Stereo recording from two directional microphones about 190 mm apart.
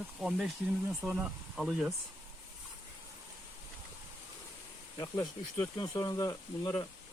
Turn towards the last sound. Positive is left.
turn(degrees=20)  # may be behind; listen again after turning